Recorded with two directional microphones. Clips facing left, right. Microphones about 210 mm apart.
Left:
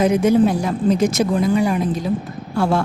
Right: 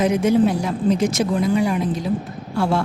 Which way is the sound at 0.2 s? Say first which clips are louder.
Left 2 dB; 40° left (ahead or behind).